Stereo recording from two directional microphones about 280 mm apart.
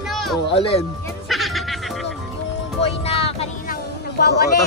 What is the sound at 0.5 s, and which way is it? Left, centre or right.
Speech, centre.